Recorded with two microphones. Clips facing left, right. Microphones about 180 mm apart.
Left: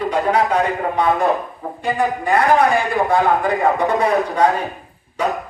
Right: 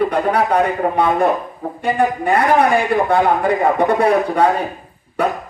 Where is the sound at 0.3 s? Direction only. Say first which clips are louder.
Right 1 dB; 60° right (ahead or behind).